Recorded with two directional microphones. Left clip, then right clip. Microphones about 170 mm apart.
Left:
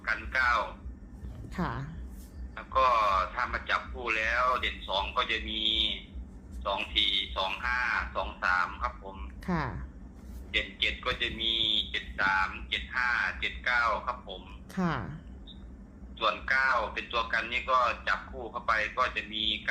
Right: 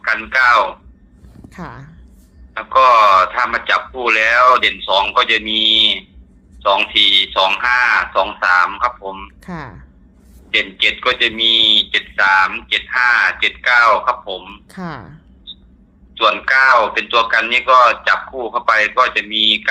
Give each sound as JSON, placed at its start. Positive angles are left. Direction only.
{"t": 0.0, "sound": "speech", "side_deg": -70}
{"t": 1.5, "sound": "speech", "side_deg": -40}
{"t": 2.6, "sound": "speech", "side_deg": -70}
{"t": 9.4, "sound": "a sound", "side_deg": -40}
{"t": 10.5, "sound": "speech", "side_deg": -70}
{"t": 14.7, "sound": "speech", "side_deg": -40}
{"t": 16.1, "sound": "speech", "side_deg": -70}